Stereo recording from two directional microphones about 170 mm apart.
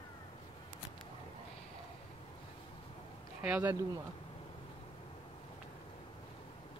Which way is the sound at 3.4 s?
10° right (ahead or behind).